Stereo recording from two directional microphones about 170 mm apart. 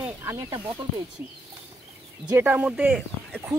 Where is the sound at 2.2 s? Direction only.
15° right (ahead or behind).